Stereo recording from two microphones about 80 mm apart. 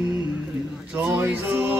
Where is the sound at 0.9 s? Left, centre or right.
Right.